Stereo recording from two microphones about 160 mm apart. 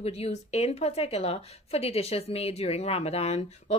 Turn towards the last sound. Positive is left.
turn(degrees=40)  # may be behind; listen again after turning